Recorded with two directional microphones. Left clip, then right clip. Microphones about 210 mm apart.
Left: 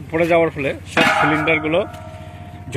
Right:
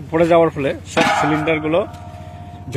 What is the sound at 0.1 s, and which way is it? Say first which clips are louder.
Speech: right 2 dB; 15° right (ahead or behind).